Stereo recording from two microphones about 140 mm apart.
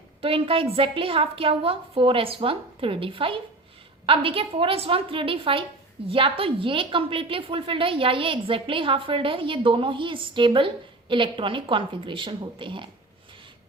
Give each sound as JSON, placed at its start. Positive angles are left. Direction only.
{"t": 0.2, "sound": "a woman's voice", "side_deg": -40}